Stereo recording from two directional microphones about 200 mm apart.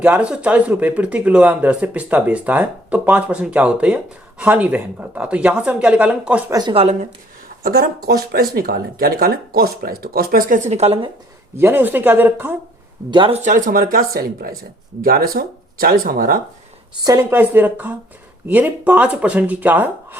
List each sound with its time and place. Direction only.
0.0 s speech: 5° right (ahead or behind)
6.5 s speech: 20° right (ahead or behind)
7.6 s speech: 50° right (ahead or behind); by 11.1 s 30° right (ahead or behind)
11.5 s speech: 10° right (ahead or behind)
13.1 s speech: 25° right (ahead or behind)
13.4 s speech: 40° right (ahead or behind)
17.0 s speech: 15° right (ahead or behind)